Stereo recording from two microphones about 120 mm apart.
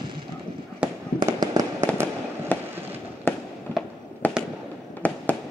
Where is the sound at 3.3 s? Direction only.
20° left (ahead or behind).